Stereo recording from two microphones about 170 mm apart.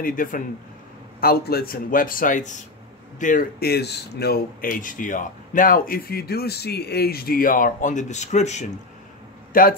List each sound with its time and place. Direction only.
0.0 s speech: 55° left (ahead or behind)
9.5 s speech: 55° left (ahead or behind)